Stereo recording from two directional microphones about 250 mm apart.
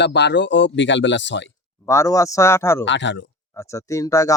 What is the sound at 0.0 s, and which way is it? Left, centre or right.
Speech, left.